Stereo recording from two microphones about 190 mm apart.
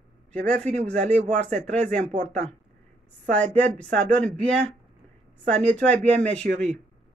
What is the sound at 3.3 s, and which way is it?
Speech, 5° left (ahead or behind).